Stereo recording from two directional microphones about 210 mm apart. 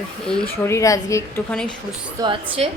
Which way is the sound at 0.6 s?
15° left (ahead or behind).